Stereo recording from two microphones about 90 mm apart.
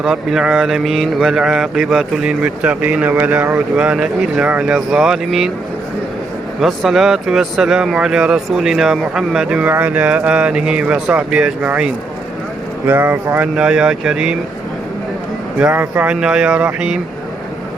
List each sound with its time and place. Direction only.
0.0 s speech: 5° right (ahead or behind)
2.4 s speech: 15° right (ahead or behind)
6.6 s speech: 5° right (ahead or behind)
12.9 s speech: 25° right (ahead or behind)
13.6 s speech: 10° right (ahead or behind)
15.7 s speech: 20° right (ahead or behind)